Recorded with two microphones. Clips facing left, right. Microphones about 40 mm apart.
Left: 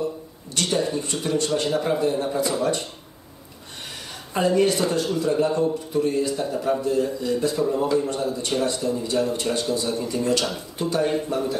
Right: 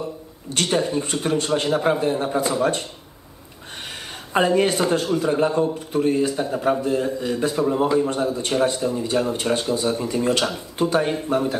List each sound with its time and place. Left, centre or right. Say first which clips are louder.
0.5 s speech: right 2 dB; right
3.8 s a sound: right 2 dB; right
5.0 s a man's voice: right 2 dB; right